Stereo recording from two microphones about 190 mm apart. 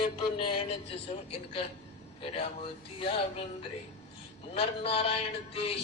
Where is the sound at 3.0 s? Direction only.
30° left (ahead or behind).